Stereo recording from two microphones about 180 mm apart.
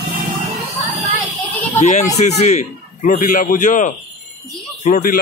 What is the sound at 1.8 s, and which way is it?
A man's voice, 45° left (ahead or behind).